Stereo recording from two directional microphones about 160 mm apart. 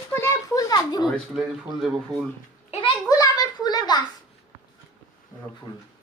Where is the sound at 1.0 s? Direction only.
Centre (ahead or behind).